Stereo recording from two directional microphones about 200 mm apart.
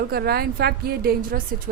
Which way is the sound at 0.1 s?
50° right (ahead or behind).